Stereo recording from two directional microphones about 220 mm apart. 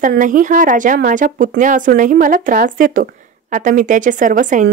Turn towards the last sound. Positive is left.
turn(degrees=-35)  # may be behind; listen again after turning